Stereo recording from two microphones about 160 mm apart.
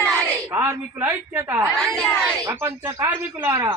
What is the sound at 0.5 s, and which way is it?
A woman's voice, 15° right (ahead or behind).